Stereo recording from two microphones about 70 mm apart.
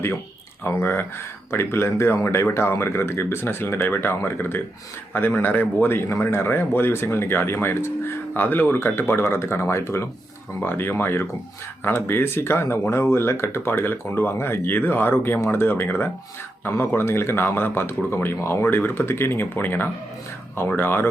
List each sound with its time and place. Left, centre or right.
0.6 s speech: left